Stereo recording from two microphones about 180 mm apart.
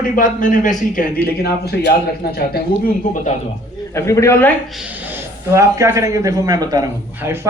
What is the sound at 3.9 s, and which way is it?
Speech, 15° left (ahead or behind).